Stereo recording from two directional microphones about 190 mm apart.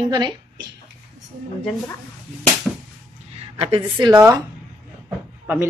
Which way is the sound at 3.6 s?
30° right (ahead or behind).